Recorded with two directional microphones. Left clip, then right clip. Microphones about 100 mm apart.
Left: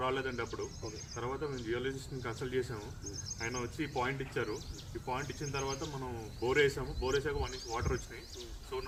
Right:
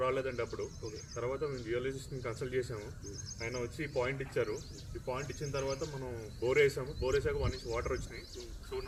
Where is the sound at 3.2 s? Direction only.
20° left (ahead or behind).